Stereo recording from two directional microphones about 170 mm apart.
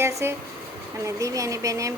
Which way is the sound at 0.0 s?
15° right (ahead or behind).